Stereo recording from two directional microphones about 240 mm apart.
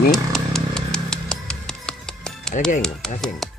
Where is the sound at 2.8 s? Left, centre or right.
Centre.